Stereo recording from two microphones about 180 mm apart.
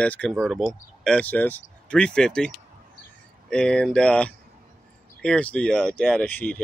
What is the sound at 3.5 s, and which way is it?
Speech, 5° left (ahead or behind).